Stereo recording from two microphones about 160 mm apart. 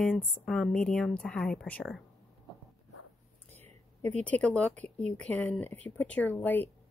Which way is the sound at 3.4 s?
45° right (ahead or behind).